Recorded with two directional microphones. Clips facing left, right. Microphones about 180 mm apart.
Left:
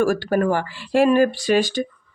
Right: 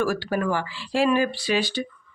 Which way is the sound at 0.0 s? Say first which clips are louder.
Left 5 dB; 50° left (ahead or behind).